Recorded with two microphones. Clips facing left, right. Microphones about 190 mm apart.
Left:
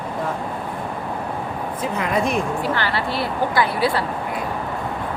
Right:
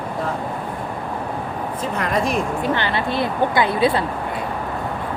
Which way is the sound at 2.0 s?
5° left (ahead or behind).